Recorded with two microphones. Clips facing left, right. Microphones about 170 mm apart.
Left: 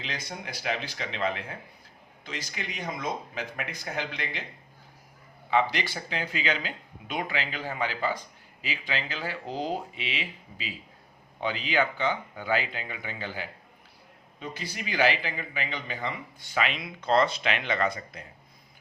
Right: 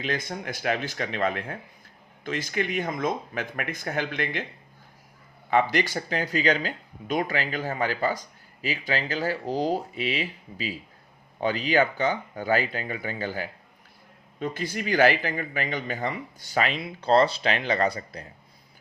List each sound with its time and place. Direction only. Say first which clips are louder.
0.0 s speech: right 7 dB; 50° right (ahead or behind)
5.5 s speech: right 3 dB; 50° right (ahead or behind)